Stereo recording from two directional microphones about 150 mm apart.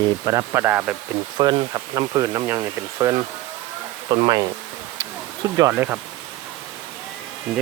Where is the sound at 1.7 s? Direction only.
25° right (ahead or behind).